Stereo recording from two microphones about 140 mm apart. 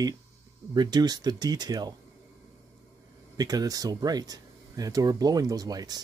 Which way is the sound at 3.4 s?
25° right (ahead or behind).